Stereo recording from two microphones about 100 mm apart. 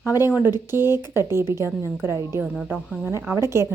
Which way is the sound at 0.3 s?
20° right (ahead or behind).